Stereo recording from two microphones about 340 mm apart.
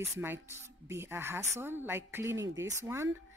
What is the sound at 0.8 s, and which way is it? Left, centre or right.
A woman's voice, centre.